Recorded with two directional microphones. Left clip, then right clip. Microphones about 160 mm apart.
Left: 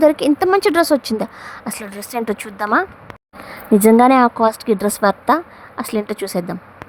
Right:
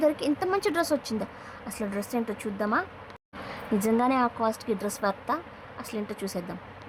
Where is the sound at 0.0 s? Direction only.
60° left (ahead or behind).